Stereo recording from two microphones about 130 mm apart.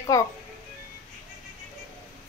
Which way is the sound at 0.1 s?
25° left (ahead or behind).